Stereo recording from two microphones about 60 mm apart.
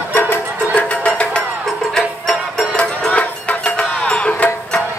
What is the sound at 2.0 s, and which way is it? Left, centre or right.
Music, centre.